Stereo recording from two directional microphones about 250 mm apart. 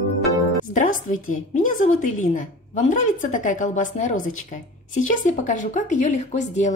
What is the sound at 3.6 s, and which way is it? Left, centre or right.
A woman's voice, left.